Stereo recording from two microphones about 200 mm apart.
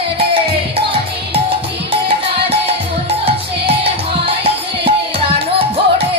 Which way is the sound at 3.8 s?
30° right (ahead or behind).